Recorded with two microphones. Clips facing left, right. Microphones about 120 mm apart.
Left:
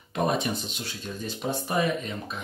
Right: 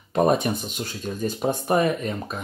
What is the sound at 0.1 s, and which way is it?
Speech, 45° right (ahead or behind).